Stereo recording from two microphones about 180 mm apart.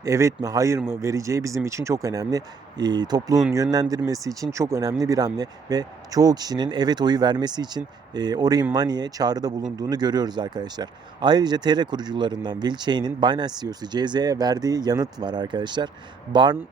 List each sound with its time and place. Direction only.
0.0 s speech: 15° right (ahead or behind)